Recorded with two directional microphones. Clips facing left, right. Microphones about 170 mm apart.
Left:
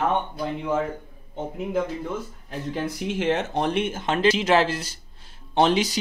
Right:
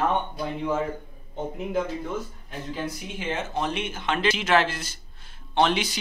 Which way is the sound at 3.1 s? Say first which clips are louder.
Left 7 dB; 75° left (ahead or behind).